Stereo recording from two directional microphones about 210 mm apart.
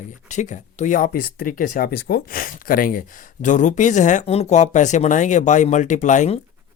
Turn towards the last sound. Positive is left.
turn(degrees=35)  # may be behind; listen again after turning